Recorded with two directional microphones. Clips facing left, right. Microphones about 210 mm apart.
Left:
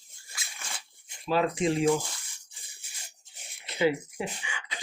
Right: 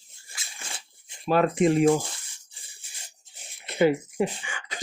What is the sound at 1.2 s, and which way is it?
Speech, 55° right (ahead or behind).